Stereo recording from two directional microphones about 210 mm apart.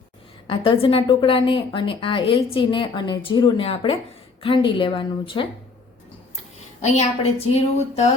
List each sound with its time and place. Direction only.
0.4 s a woman's voice: 25° left (ahead or behind)
6.8 s a woman's voice: 30° left (ahead or behind)